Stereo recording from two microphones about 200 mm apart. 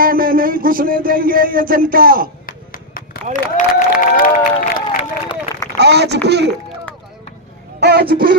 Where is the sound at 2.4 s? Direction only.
45° left (ahead or behind).